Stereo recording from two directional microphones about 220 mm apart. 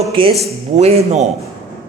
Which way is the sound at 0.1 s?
25° right (ahead or behind).